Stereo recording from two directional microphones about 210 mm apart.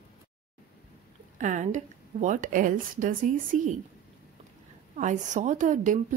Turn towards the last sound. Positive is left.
turn(degrees=-40)  # may be behind; listen again after turning